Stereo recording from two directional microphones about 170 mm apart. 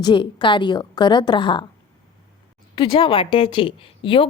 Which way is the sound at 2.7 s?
30° left (ahead or behind).